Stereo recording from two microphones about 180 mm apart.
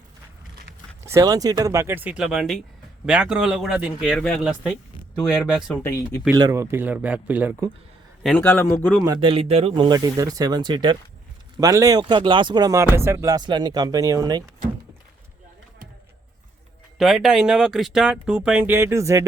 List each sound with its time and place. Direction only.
1.0 s speech: 20° right (ahead or behind); by 4.7 s centre (ahead or behind)
5.7 s speech: 10° left (ahead or behind)
6.3 s speech: 15° right (ahead or behind)
8.2 s a man's voice: centre (ahead or behind)
9.2 s speech: 35° right (ahead or behind)
17.0 s speech: centre (ahead or behind)